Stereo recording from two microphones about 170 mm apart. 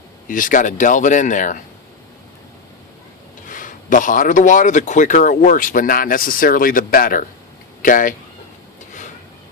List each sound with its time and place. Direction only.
0.3 s speech: 50° left (ahead or behind)
3.4 s speech: 50° left (ahead or behind)